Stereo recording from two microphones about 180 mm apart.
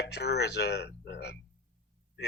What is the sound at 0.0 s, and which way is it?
A man's voice, 70° left (ahead or behind).